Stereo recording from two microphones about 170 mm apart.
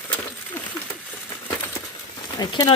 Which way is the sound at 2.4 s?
25° left (ahead or behind).